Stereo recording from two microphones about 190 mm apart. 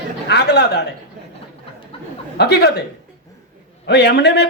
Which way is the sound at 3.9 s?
60° left (ahead or behind).